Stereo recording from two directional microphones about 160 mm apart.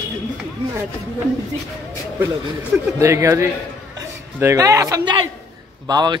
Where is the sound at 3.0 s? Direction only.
15° right (ahead or behind).